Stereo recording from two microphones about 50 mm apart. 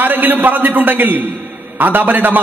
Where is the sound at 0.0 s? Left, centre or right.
Right.